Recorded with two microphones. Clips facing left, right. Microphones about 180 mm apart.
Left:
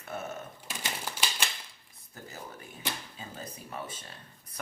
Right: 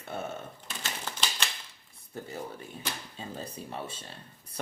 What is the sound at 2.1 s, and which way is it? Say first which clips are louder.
Speech: right 6 dB; 30° right (ahead or behind).